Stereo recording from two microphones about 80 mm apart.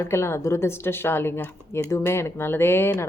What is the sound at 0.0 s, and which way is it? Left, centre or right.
Speech, left.